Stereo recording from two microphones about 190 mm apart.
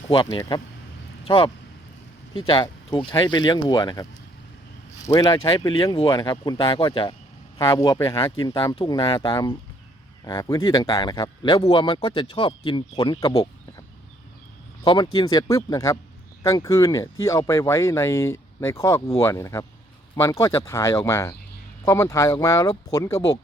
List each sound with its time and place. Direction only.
0.1 s speech: 25° left (ahead or behind)
2.5 s speech: 25° left (ahead or behind)
5.0 s speech: 20° left (ahead or behind)
14.8 s speech: 25° left (ahead or behind)